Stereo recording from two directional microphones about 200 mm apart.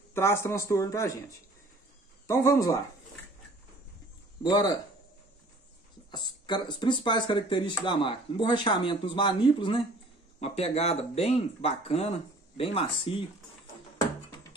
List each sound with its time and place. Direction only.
0.1 s speech: 15° left (ahead or behind)
2.2 s speech: 15° left (ahead or behind)
4.4 s speech: 20° left (ahead or behind)
6.1 s speech: 20° left (ahead or behind)